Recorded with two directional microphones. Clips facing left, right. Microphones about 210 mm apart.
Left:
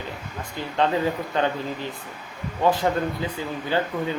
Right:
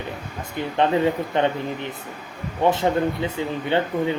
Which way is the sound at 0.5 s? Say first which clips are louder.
Right 3 dB; 25° right (ahead or behind).